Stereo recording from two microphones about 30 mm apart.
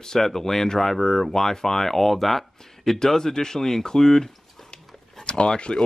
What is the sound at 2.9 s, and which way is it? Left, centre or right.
Speech, centre.